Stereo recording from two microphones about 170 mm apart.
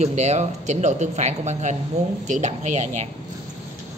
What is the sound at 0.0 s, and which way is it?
Speech, 40° right (ahead or behind).